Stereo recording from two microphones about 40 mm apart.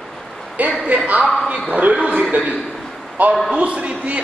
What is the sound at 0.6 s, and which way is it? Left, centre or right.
Speech, right.